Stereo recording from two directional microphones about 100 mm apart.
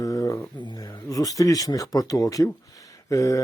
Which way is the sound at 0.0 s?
35° left (ahead or behind).